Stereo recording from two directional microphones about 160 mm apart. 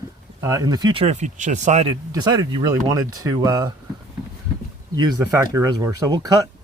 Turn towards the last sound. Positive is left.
turn(degrees=-20)  # may be behind; listen again after turning